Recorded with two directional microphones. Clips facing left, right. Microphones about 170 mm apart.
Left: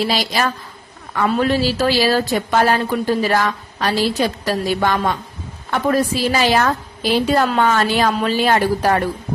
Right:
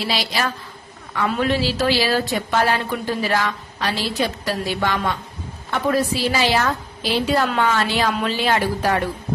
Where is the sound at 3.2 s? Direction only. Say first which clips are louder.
Left 4 dB; 45° left (ahead or behind).